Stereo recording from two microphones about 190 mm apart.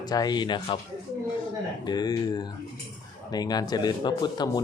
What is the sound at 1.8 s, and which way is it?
Speech, 20° left (ahead or behind).